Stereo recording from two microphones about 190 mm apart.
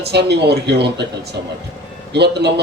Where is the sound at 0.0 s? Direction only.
60° right (ahead or behind).